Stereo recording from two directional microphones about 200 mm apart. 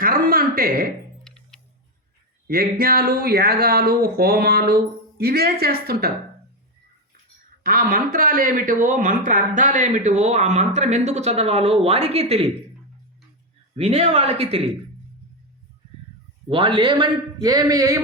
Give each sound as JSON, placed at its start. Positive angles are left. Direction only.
{"t": 0.0, "sound": "speech", "side_deg": -45}
{"t": 1.2, "sound": "clock", "side_deg": 5}
{"t": 2.5, "sound": "speech", "side_deg": -50}
{"t": 7.6, "sound": "a man's voice", "side_deg": -45}
{"t": 13.7, "sound": "a man's voice", "side_deg": -30}
{"t": 16.5, "sound": "a man's voice", "side_deg": -25}